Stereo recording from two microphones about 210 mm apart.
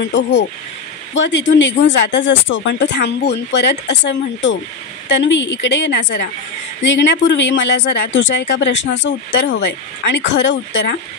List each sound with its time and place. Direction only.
0.0 s speech: 60° left (ahead or behind)